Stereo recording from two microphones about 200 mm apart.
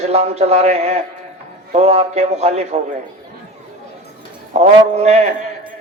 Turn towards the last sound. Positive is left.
turn(degrees=-35)  # may be behind; listen again after turning